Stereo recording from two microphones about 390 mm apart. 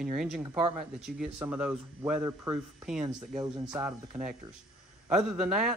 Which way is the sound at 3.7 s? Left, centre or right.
Centre.